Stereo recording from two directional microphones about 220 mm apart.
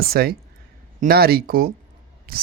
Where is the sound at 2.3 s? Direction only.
45° right (ahead or behind).